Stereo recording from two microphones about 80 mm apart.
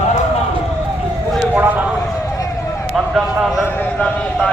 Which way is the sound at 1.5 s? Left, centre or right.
Right.